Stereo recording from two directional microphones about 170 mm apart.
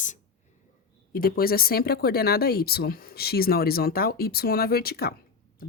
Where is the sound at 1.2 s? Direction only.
60° left (ahead or behind).